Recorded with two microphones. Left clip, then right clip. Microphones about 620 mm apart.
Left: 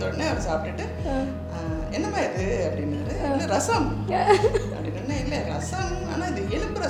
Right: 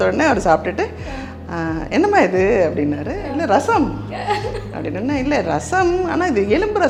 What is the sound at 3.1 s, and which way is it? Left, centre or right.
Music, right.